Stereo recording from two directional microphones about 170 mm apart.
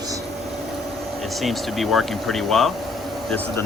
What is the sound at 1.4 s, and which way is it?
Speech, centre (ahead or behind).